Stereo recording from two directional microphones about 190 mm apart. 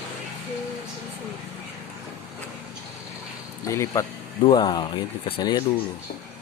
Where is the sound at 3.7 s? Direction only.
15° left (ahead or behind).